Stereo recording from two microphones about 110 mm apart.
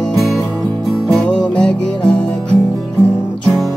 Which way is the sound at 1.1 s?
10° left (ahead or behind).